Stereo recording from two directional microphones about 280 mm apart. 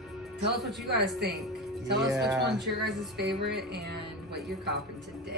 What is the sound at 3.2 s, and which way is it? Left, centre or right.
Speech, right.